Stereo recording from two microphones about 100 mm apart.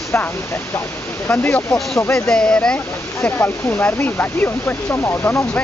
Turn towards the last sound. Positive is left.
turn(degrees=20)  # may be behind; listen again after turning